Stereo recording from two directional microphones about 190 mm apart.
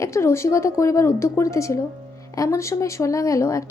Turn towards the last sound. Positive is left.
turn(degrees=15)  # may be behind; listen again after turning